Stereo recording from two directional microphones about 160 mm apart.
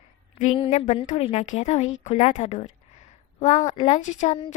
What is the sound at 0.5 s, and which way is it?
A woman's voice, 35° left (ahead or behind).